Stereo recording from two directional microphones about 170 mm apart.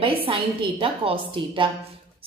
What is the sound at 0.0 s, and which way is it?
A woman's voice, 30° right (ahead or behind).